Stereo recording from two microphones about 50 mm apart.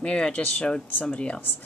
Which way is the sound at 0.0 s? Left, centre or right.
Left.